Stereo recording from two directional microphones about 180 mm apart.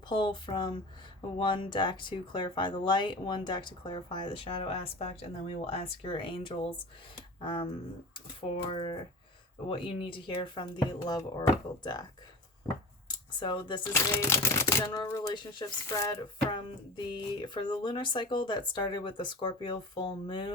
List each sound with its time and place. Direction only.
0.1 s speech: 25° left (ahead or behind)
13.1 s a sound: 25° left (ahead or behind)
13.9 s speech: 15° left (ahead or behind)